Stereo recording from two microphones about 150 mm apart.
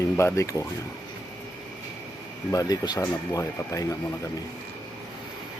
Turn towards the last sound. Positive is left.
turn(degrees=25)  # may be behind; listen again after turning